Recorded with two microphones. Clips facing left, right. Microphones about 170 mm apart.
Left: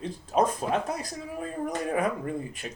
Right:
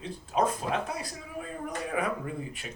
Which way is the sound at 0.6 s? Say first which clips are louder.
Left 3 dB; 40° left (ahead or behind).